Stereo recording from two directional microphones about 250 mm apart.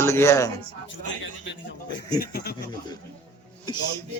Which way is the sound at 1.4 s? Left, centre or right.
Left.